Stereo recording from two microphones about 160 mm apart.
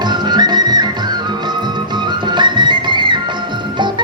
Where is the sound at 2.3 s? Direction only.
30° right (ahead or behind).